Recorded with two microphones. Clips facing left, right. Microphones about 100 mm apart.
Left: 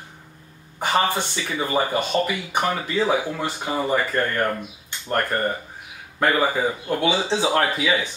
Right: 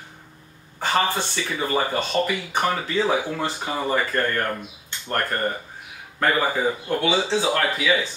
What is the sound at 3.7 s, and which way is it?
Speech, 15° left (ahead or behind).